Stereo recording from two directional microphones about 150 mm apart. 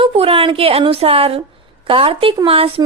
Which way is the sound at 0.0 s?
40° right (ahead or behind).